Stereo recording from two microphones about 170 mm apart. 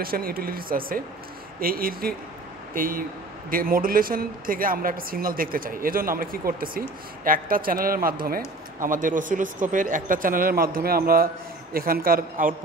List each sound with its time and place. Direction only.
0.0 s speech: 60° right (ahead or behind)